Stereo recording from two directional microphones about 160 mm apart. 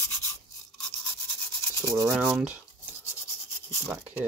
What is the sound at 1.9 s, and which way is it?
Speech, 10° right (ahead or behind).